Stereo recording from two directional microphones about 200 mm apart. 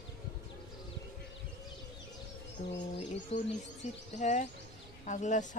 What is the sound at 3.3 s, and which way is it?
Bird, 30° left (ahead or behind).